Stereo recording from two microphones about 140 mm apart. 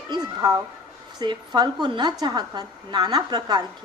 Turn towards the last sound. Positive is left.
turn(degrees=-30)  # may be behind; listen again after turning